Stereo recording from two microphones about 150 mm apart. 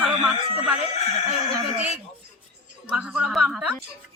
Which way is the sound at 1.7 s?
10° right (ahead or behind).